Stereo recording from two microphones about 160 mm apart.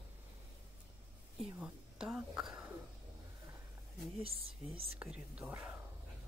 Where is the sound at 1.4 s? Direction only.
5° right (ahead or behind).